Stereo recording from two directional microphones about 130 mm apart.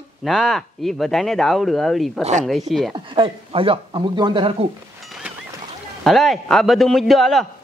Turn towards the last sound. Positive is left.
turn(degrees=0)  # may be behind; listen again after turning